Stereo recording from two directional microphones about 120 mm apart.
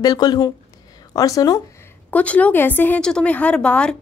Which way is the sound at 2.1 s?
10° left (ahead or behind).